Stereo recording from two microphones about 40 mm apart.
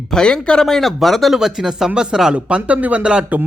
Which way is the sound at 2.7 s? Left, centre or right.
Right.